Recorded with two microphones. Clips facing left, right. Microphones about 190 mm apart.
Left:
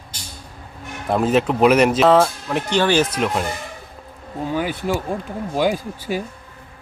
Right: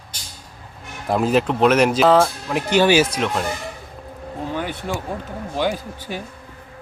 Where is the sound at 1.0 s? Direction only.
Centre (ahead or behind).